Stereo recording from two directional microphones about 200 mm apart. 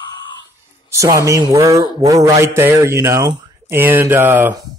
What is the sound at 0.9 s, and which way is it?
A man's voice, 15° right (ahead or behind).